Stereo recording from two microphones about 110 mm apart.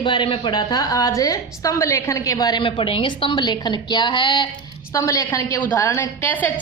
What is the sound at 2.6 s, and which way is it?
A woman's voice, 55° left (ahead or behind).